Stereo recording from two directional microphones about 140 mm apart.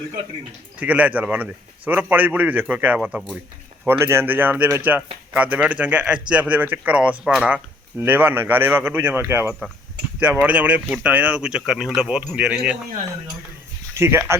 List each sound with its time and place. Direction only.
0.8 s speech: 10° right (ahead or behind)
14.0 s speech: 20° right (ahead or behind)